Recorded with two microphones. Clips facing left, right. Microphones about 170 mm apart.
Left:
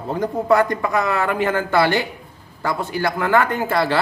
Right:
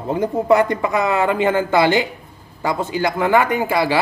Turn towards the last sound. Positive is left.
turn(degrees=-10)  # may be behind; listen again after turning